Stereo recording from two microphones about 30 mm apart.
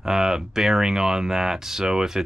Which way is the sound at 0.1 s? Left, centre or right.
Centre.